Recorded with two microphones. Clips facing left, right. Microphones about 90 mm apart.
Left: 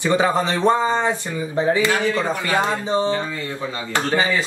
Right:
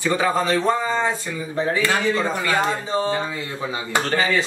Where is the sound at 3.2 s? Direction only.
10° right (ahead or behind).